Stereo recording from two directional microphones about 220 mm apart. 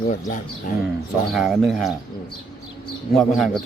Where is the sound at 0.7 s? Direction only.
40° left (ahead or behind).